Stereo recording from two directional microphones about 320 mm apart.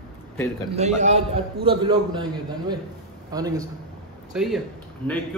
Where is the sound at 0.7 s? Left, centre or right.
Right.